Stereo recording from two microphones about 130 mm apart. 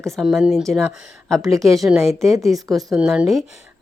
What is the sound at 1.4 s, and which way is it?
Speech, 25° right (ahead or behind).